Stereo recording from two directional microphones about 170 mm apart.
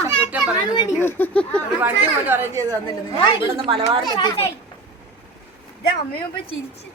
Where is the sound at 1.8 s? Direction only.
10° right (ahead or behind).